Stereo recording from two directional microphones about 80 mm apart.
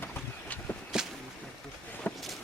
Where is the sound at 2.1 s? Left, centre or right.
Left.